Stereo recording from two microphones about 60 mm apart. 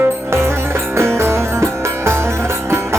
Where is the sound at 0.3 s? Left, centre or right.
Right.